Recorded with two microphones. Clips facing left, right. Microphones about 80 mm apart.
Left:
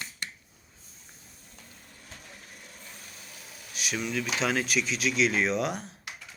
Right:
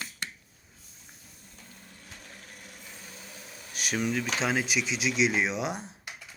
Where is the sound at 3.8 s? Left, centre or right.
Right.